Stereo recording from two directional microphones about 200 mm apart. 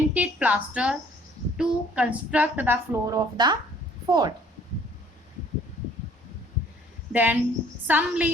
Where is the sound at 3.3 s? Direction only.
20° right (ahead or behind).